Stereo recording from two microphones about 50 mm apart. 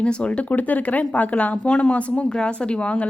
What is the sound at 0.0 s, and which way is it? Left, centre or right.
Speech, left.